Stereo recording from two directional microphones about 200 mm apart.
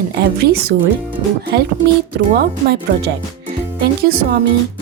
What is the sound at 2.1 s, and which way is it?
A woman's voice, 55° right (ahead or behind).